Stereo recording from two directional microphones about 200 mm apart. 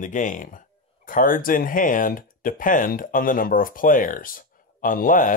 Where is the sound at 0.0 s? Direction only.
40° left (ahead or behind).